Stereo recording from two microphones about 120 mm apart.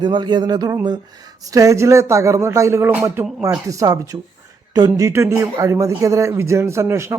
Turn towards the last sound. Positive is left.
turn(degrees=-25)  # may be behind; listen again after turning